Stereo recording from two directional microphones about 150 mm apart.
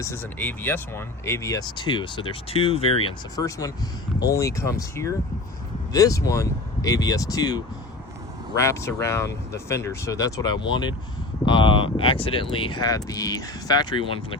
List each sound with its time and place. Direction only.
0.0 s speech: 15° left (ahead or behind); by 3.2 s 40° left (ahead or behind)
3.3 s speech: 25° left (ahead or behind)